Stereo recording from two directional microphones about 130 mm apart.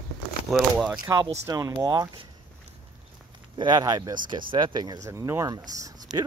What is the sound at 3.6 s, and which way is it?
Speech, 35° right (ahead or behind).